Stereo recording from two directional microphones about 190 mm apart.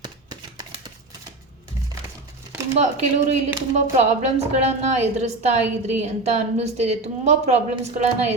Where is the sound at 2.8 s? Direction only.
35° right (ahead or behind).